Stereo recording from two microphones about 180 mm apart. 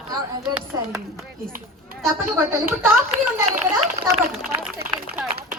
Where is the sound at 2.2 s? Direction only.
10° right (ahead or behind).